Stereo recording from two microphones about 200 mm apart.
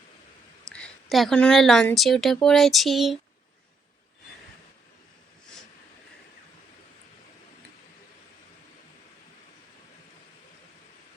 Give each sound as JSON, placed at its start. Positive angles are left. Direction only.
{"t": 0.7, "sound": "a woman's voice", "side_deg": 0}